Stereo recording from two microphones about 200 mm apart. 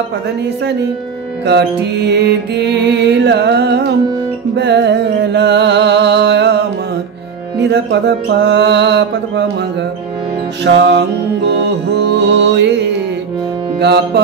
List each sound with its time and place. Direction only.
1.4 s music: 55° right (ahead or behind)
10.6 s music: 60° right (ahead or behind)
13.7 s music: 55° right (ahead or behind)